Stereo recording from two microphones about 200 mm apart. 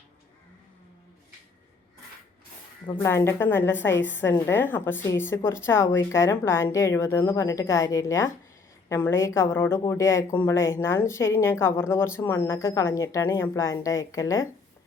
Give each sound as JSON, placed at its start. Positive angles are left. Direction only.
{"t": 2.8, "sound": "a woman's voice", "side_deg": 15}